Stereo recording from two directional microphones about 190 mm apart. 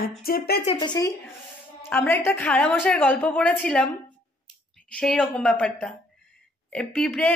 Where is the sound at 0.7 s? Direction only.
25° left (ahead or behind); by 3.9 s 5° left (ahead or behind).